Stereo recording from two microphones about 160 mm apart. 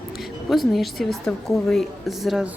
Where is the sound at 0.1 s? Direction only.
Centre (ahead or behind).